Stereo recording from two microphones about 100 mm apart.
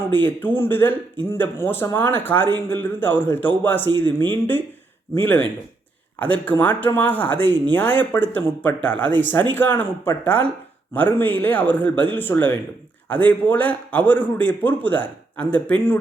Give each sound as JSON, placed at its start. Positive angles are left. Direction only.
{"t": 0.1, "sound": "a man's voice", "side_deg": 20}